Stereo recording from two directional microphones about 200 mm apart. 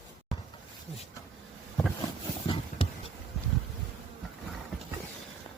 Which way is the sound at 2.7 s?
40° left (ahead or behind).